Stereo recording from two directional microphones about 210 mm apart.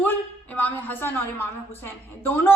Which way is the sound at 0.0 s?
10° left (ahead or behind).